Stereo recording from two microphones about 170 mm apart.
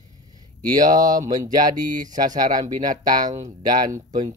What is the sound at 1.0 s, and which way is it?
Speech, 20° right (ahead or behind).